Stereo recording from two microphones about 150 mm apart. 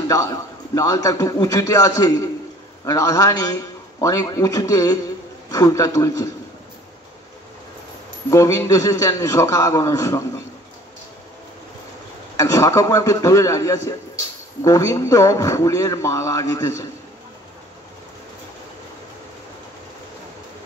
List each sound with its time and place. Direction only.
0.1 s speech: 20° left (ahead or behind)
8.3 s speech: 20° left (ahead or behind)
12.4 s speech: 20° left (ahead or behind)